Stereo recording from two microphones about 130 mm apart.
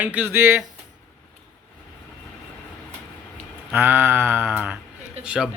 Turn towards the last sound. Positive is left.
turn(degrees=-5)  # may be behind; listen again after turning